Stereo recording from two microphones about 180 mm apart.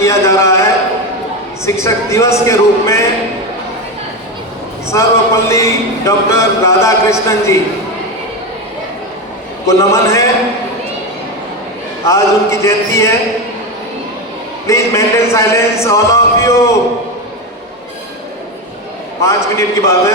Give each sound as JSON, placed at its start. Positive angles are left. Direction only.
{"t": 0.0, "sound": "a sound", "side_deg": 15}
{"t": 1.6, "sound": "a man's voice", "side_deg": 15}
{"t": 4.9, "sound": "a man's voice", "side_deg": 15}
{"t": 9.6, "sound": "a man's voice", "side_deg": 15}
{"t": 12.0, "sound": "a man's voice", "side_deg": 15}
{"t": 14.7, "sound": "a man's voice", "side_deg": 15}
{"t": 19.2, "sound": "a man's voice", "side_deg": 15}